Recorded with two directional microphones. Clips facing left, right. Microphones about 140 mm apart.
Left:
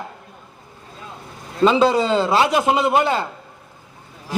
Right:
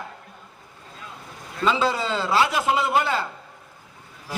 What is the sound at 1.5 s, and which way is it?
A man's voice, 20° left (ahead or behind).